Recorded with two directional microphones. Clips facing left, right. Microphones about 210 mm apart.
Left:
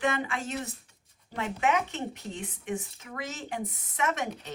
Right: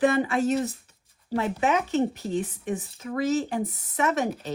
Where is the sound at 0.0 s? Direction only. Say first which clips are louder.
Right 8 dB; 35° right (ahead or behind).